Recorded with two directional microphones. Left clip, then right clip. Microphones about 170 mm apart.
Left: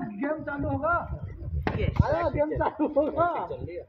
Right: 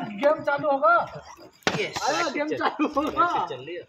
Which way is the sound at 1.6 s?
10° left (ahead or behind).